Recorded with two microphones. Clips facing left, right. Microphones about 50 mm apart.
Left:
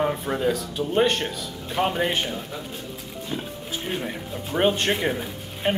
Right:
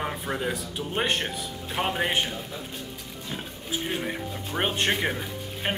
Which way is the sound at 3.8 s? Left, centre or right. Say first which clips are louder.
Left 1 dB; centre.